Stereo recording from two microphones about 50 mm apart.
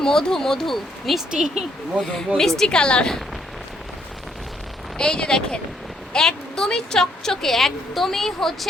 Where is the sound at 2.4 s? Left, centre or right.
Centre.